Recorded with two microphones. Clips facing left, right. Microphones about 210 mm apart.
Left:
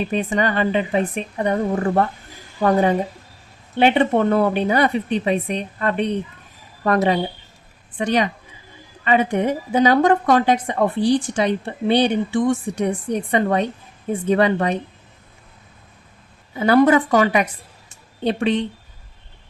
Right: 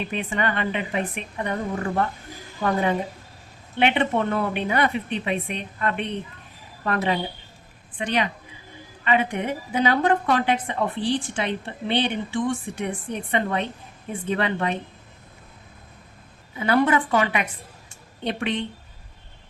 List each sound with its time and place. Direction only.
0.0 s a woman's voice: 40° left (ahead or behind)
16.6 s a woman's voice: 40° left (ahead or behind)